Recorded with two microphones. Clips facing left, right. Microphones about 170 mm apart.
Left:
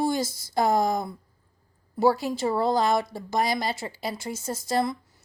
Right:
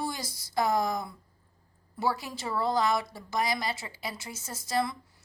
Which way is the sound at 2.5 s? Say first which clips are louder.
Left 3 dB; 25° left (ahead or behind).